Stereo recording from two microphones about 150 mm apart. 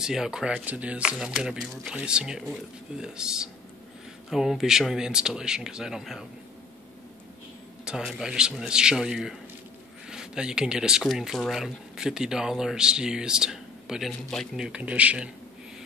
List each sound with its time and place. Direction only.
0.0 s speech: 5° right (ahead or behind)
7.8 s speech: centre (ahead or behind)